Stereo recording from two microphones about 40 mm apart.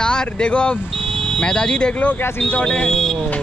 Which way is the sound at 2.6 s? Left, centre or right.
Left.